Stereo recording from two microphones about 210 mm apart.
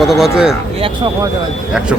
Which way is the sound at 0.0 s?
Centre (ahead or behind).